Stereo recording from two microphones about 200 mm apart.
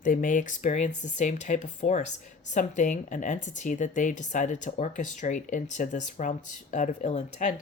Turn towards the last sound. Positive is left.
turn(degrees=35)  # may be behind; listen again after turning